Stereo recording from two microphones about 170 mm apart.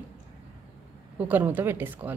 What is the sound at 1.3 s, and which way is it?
Speech, 10° right (ahead or behind).